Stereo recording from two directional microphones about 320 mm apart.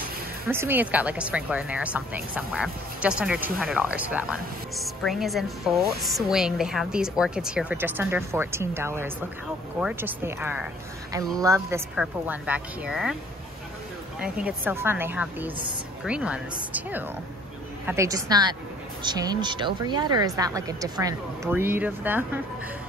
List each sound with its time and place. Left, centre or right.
0.5 s speech: centre
14.2 s speech: centre